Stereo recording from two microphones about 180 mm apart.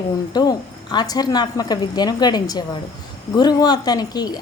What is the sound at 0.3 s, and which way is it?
Speech, 25° left (ahead or behind).